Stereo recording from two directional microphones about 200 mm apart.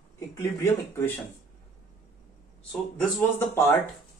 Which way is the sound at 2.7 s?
Centre (ahead or behind).